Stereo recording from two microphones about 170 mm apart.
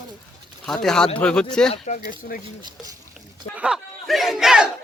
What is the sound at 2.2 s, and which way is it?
Speech, 60° left (ahead or behind).